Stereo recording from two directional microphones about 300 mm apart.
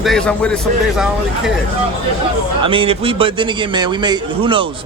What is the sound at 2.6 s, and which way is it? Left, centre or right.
A man's voice, centre.